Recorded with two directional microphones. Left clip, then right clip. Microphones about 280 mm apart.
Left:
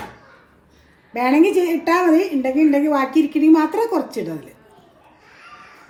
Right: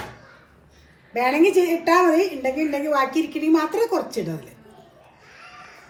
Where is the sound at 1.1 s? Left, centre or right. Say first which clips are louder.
Left 2 dB; left.